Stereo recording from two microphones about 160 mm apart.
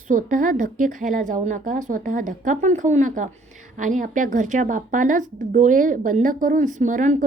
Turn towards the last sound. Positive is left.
turn(degrees=-50)  # may be behind; listen again after turning